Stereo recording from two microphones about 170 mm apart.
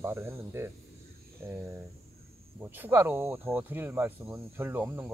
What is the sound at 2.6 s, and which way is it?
Speech, 10° right (ahead or behind).